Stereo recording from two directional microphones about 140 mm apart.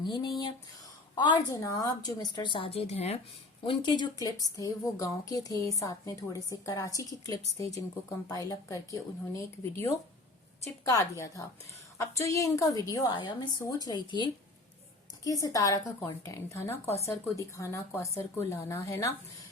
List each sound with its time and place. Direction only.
0.0 s a woman's voice: 30° left (ahead or behind); by 3.2 s 50° left (ahead or behind)
3.7 s a woman's voice: 35° left (ahead or behind)